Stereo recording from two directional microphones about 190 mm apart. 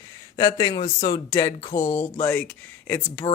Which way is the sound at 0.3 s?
20° left (ahead or behind).